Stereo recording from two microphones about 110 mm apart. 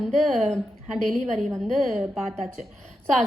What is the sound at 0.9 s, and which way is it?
A woman's voice, centre (ahead or behind).